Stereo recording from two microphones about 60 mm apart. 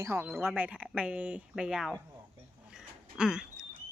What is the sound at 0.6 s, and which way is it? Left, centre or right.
Speech, right.